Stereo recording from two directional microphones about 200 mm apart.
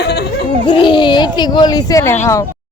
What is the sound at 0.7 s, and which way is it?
Speech, 25° left (ahead or behind).